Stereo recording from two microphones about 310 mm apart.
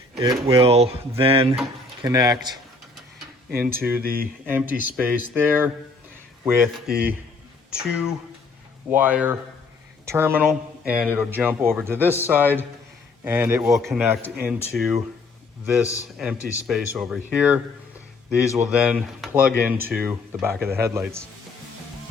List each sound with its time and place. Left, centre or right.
0.2 s a man's voice: centre
3.6 s a man's voice: centre
4.0 s speech: right
4.9 s a man's voice: centre